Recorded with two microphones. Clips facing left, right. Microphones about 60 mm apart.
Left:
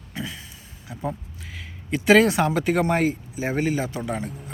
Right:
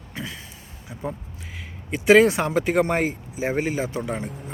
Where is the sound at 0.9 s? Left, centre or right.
Centre.